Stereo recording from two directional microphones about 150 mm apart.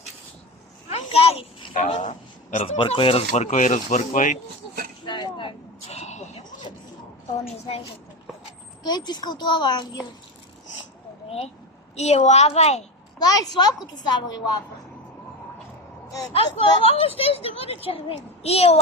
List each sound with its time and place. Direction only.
0.9 s children playing: 40° left (ahead or behind)
1.7 s a sound: 55° left (ahead or behind)
2.8 s speech: 40° left (ahead or behind); by 4.4 s 55° left (ahead or behind)
5.0 s a sound: 30° left (ahead or behind); by 6.4 s 45° left (ahead or behind)
8.8 s a child's voice: 30° left (ahead or behind)
11.3 s speech: 40° left (ahead or behind)
13.2 s a child's voice: 25° left (ahead or behind)
16.3 s a woman's voice: 40° left (ahead or behind)